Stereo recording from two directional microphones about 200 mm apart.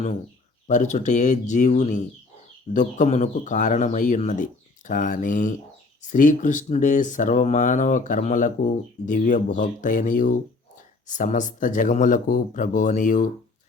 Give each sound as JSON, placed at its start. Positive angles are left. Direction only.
{"t": 0.7, "sound": "speech", "side_deg": 35}